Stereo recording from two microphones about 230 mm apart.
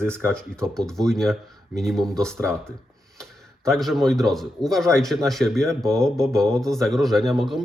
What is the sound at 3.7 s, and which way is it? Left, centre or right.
Speech, centre.